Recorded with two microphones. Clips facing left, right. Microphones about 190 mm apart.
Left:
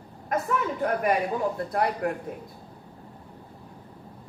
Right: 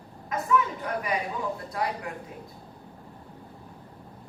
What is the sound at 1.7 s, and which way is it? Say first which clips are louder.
Speech: left 5 dB; 55° left (ahead or behind).